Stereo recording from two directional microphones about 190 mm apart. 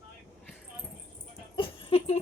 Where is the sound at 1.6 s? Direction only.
30° left (ahead or behind).